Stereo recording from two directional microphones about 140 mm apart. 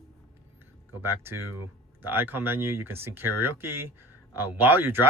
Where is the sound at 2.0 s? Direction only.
15° right (ahead or behind).